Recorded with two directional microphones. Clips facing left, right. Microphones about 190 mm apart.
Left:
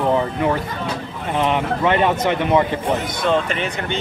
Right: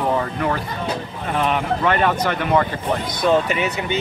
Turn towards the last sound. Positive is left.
turn(degrees=-5)  # may be behind; listen again after turning